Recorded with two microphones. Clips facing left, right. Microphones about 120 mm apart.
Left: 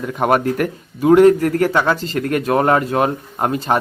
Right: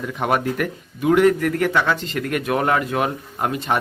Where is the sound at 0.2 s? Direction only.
45° left (ahead or behind).